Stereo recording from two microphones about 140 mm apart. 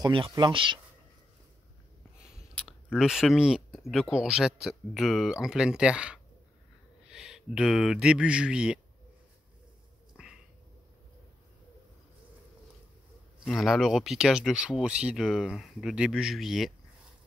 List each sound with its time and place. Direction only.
0.0 s speech: 35° right (ahead or behind)
2.2 s speech: 5° right (ahead or behind)
10.1 s cat: 5° right (ahead or behind)
13.4 s speech: centre (ahead or behind)